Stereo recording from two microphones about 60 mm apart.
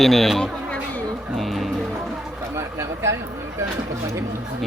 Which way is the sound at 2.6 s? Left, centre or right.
Right.